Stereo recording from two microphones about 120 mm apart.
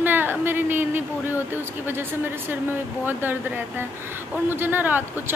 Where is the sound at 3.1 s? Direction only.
15° right (ahead or behind).